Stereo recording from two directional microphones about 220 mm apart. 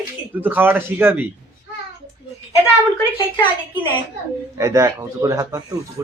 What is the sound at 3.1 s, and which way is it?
Speech, 20° left (ahead or behind).